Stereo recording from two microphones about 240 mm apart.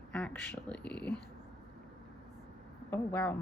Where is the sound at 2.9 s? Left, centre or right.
Centre.